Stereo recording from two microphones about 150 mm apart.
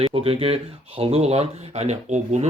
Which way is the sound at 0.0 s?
40° right (ahead or behind).